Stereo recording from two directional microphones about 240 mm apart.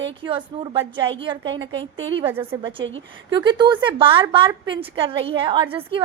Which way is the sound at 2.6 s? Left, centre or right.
Right.